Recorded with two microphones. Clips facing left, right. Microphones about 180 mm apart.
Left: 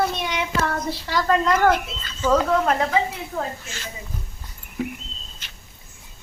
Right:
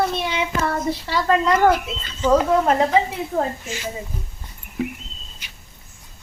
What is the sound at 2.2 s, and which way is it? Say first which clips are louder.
Speech: right 2 dB; 25° right (ahead or behind).